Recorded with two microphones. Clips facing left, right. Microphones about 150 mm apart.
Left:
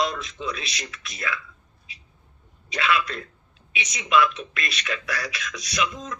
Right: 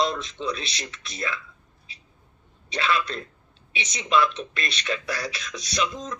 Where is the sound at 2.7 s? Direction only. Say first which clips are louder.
Left 1 dB; 30° right (ahead or behind).